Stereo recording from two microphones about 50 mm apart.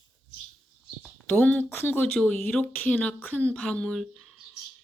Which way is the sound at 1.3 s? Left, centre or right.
Left.